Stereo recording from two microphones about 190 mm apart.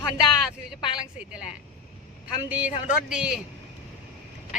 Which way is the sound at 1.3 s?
5° right (ahead or behind).